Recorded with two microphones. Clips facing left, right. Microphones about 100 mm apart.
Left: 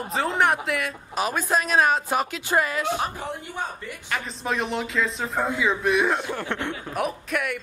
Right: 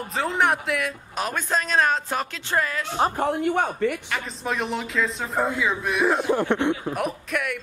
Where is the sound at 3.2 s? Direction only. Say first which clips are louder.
Right 9 dB; 65° right (ahead or behind).